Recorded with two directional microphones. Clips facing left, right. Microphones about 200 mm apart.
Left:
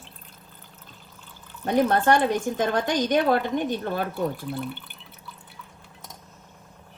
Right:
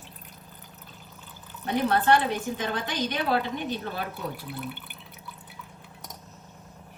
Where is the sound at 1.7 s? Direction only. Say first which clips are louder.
Left 3 dB; 50° left (ahead or behind).